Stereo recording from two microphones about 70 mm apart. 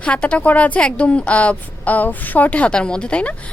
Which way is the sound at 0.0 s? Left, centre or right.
Centre.